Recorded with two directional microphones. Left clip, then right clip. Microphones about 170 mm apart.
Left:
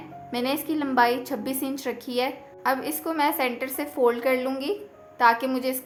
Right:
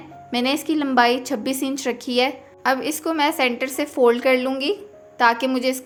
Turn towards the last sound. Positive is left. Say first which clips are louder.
# right 4 dB
turn(degrees=-30)  # may be behind; listen again after turning